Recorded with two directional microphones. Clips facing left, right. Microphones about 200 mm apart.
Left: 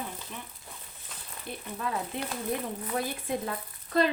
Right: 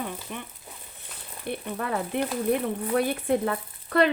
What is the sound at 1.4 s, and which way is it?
Speech, 65° right (ahead or behind).